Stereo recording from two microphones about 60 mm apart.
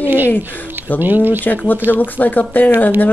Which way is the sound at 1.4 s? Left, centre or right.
Left.